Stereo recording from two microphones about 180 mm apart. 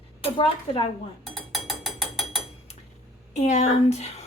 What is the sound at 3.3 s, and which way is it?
Speech, 40° left (ahead or behind).